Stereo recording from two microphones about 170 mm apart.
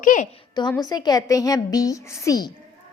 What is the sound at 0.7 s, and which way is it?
A woman's voice, 20° left (ahead or behind).